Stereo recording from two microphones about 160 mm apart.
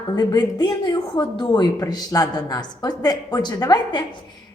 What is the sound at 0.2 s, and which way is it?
Speech, 25° left (ahead or behind).